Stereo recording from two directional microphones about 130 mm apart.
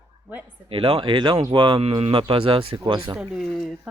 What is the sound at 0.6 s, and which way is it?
Speech, 45° right (ahead or behind).